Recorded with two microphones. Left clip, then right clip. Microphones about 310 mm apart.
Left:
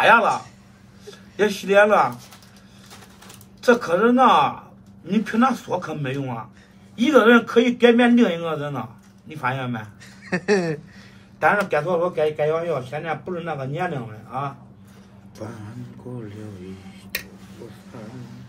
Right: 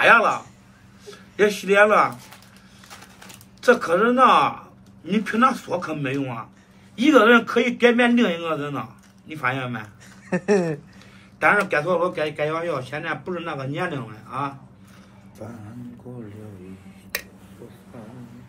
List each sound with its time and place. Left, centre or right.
0.0 s a man's voice: centre
3.6 s a man's voice: centre
10.3 s speech: centre
11.3 s a man's voice: centre
15.4 s a man's voice: left